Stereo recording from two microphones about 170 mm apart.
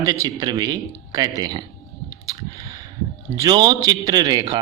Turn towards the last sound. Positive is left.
turn(degrees=-25)  # may be behind; listen again after turning